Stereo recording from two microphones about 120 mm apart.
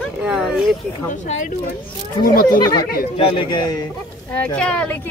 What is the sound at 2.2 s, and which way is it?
Speech, 30° left (ahead or behind).